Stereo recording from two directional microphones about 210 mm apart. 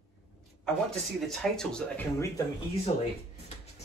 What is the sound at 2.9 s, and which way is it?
Speech, 35° left (ahead or behind).